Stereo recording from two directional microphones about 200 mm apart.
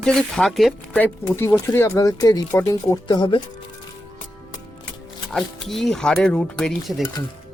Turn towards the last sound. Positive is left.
turn(degrees=0)  # may be behind; listen again after turning